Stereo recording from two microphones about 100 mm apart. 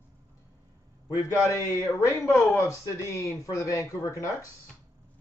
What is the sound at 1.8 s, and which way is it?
Speech, 30° left (ahead or behind).